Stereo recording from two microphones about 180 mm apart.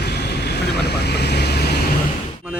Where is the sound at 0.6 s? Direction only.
65° left (ahead or behind).